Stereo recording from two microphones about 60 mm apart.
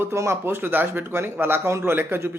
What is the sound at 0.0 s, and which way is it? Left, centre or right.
A man's voice, right.